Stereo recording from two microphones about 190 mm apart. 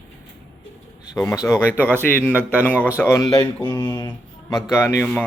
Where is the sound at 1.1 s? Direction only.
15° left (ahead or behind).